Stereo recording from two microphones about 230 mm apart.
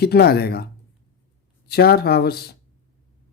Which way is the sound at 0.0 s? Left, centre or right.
Left.